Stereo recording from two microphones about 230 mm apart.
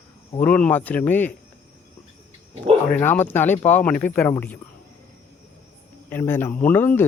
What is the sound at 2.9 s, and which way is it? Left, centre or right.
Speech, centre.